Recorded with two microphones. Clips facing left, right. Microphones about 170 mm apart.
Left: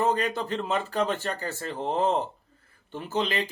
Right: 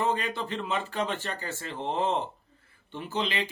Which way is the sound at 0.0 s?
40° left (ahead or behind).